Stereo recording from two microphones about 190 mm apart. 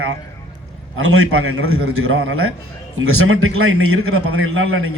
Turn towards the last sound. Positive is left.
turn(degrees=-90)